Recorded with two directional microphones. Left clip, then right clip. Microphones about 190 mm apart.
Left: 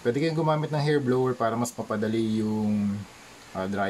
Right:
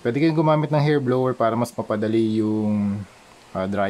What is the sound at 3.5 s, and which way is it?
Speech, 50° right (ahead or behind).